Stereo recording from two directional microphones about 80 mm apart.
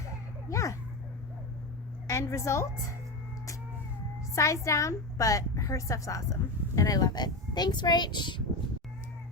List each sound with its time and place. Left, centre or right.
0.4 s children playing: left
2.0 s a woman's voice: left
4.4 s a woman's voice: left